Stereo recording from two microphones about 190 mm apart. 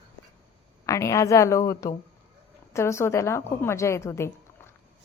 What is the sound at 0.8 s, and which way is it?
A woman's voice, 15° left (ahead or behind).